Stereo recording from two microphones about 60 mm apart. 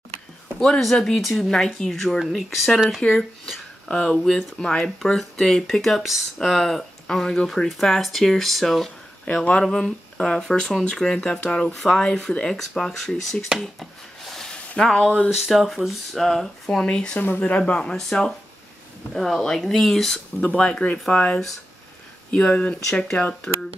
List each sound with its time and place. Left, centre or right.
0.6 s speech: centre
9.2 s speech: centre
13.6 s a sound: centre
14.5 s a sound: centre
15.3 s speech: centre
16.8 s speech: centre
20.4 s speech: centre